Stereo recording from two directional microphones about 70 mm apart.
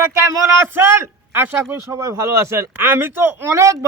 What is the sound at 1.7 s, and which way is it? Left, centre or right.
Speech, right.